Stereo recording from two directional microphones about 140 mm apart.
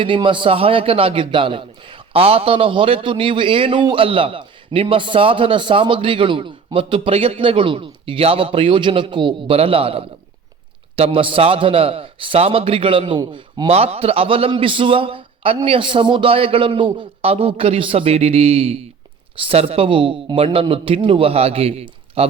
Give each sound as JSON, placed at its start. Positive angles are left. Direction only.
{"t": 0.0, "sound": "a man's voice", "side_deg": -35}
{"t": 13.7, "sound": "a man's voice", "side_deg": -45}